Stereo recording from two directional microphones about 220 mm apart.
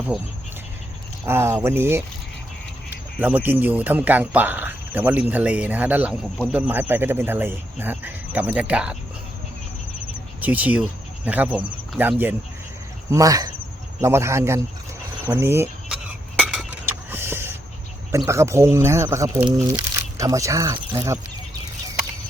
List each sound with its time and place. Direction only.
1.2 s speech: 10° right (ahead or behind)
3.2 s speech: 10° right (ahead or behind)
10.4 s speech: 5° right (ahead or behind)
15.3 s cutlery: 10° right (ahead or behind)
18.3 s speech: 15° right (ahead or behind)